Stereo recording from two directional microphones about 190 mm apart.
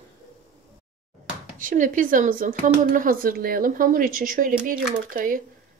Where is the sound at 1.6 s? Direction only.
45° right (ahead or behind).